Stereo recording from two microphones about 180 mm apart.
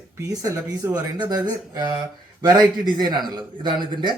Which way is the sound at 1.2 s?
20° right (ahead or behind).